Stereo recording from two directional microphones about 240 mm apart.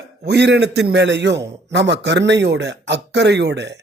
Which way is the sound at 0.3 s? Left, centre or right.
Right.